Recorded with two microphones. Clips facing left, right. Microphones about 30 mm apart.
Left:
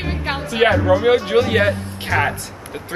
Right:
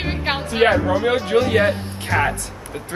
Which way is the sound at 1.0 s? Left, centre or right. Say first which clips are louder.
Left 3 dB; centre.